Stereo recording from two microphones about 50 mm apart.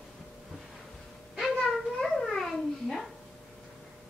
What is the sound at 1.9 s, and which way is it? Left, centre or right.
Babbling, centre.